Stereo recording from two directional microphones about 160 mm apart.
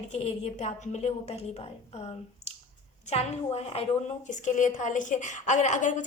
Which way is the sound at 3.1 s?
40° left (ahead or behind).